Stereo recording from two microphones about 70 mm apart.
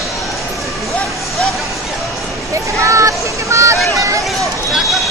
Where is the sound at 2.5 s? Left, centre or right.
Right.